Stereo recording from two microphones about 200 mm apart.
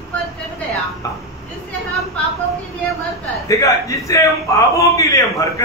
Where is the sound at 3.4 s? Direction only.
15° left (ahead or behind).